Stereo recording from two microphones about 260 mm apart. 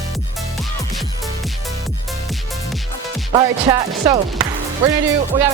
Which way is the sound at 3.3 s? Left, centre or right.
Centre.